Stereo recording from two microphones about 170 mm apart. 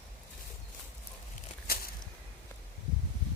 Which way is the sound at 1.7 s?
65° left (ahead or behind).